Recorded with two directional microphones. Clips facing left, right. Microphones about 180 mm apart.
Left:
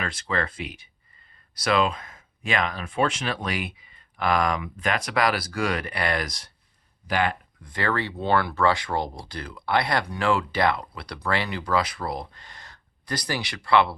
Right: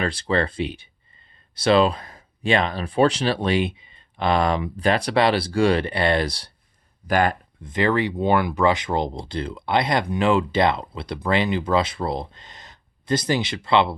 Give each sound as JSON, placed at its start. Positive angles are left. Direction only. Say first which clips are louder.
{"t": 0.0, "sound": "speech", "louder": "right 6 dB", "side_deg": -30}
{"t": 7.1, "sound": "speech", "louder": "right 5 dB", "side_deg": -45}
{"t": 7.6, "sound": "speech", "louder": "right 6 dB", "side_deg": -20}